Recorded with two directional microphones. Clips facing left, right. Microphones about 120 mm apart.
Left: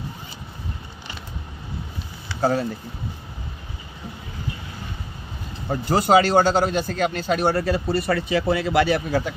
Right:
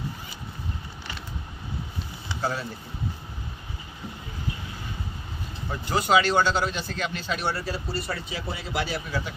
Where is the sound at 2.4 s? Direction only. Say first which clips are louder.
Left 9 dB; 45° left (ahead or behind).